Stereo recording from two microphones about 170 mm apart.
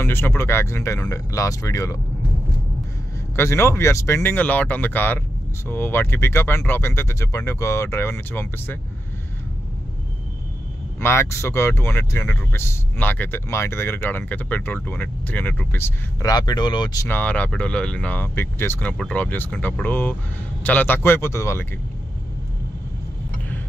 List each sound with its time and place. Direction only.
0.0 s speech: 15° left (ahead or behind)
3.3 s speech: 15° left (ahead or behind)
11.0 s speech: 15° left (ahead or behind)